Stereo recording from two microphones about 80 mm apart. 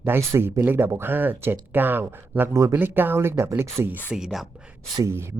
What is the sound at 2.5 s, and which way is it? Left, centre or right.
Speech, right.